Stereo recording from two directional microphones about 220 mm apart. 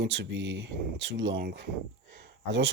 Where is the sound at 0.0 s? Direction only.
55° right (ahead or behind).